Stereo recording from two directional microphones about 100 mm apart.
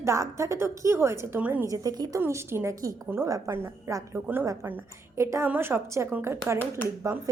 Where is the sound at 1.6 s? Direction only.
35° right (ahead or behind).